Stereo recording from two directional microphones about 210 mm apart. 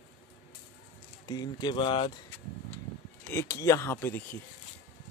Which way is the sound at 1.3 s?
20° left (ahead or behind).